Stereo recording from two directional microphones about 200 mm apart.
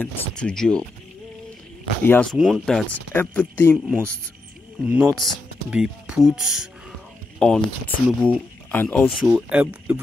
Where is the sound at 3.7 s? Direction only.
5° right (ahead or behind).